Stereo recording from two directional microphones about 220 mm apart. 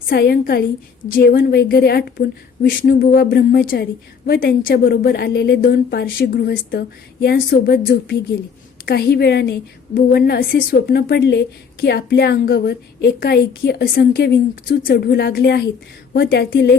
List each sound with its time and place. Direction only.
0.0 s a woman's voice: 45° left (ahead or behind)